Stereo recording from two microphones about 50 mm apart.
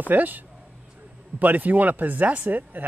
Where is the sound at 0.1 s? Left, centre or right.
Right.